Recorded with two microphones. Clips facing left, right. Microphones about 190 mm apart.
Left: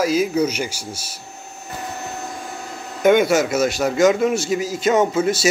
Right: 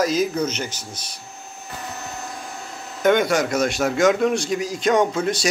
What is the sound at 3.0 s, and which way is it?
A man's voice, 10° left (ahead or behind).